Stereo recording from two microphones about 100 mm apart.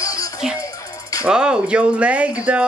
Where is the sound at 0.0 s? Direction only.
35° left (ahead or behind).